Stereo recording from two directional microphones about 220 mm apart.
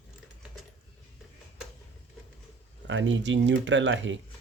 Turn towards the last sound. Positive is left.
turn(degrees=-60)  # may be behind; listen again after turning